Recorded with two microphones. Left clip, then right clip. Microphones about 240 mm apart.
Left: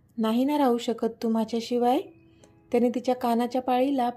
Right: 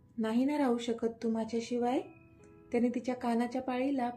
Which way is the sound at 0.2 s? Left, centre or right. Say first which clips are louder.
Left 7 dB; left.